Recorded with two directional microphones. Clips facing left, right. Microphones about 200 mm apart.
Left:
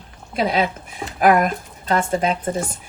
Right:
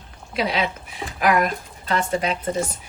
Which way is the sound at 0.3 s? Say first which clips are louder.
Left 3 dB; 50° left (ahead or behind).